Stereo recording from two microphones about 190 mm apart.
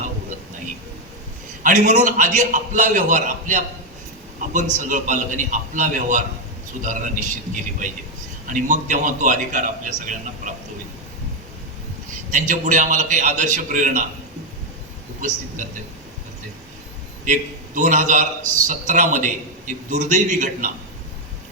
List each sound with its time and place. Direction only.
1.6 s a man's voice: 40° right (ahead or behind)
12.3 s a man's voice: 45° right (ahead or behind)
17.7 s a man's voice: 40° right (ahead or behind)